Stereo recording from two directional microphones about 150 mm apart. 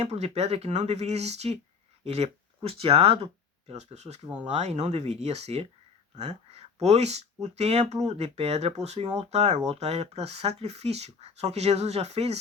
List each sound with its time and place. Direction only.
0.0 s speech: 45° right (ahead or behind)